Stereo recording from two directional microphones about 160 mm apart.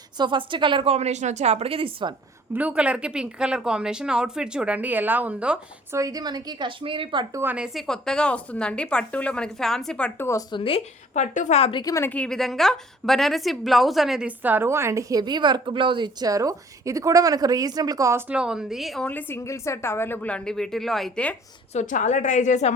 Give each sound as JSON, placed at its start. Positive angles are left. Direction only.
{"t": 0.2, "sound": "a woman's voice", "side_deg": -30}
{"t": 2.5, "sound": "speech", "side_deg": -10}
{"t": 6.0, "sound": "a woman's voice", "side_deg": -25}
{"t": 7.3, "sound": "a woman's voice", "side_deg": -10}
{"t": 10.2, "sound": "speech", "side_deg": 20}
{"t": 10.6, "sound": "speech", "side_deg": 35}
{"t": 11.8, "sound": "speech", "side_deg": 20}
{"t": 12.1, "sound": "a woman's voice", "side_deg": 5}
{"t": 18.3, "sound": "a woman's voice", "side_deg": -5}
{"t": 21.7, "sound": "a woman's voice", "side_deg": 50}